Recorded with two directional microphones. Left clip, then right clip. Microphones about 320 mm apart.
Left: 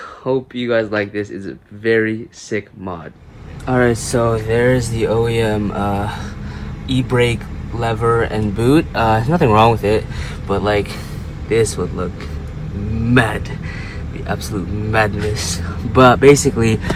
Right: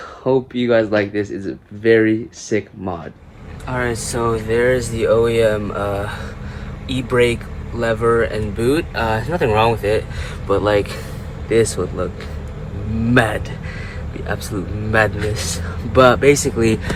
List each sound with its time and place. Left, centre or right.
0.3 s speech: centre
13.1 s speech: centre
14.9 s speech: centre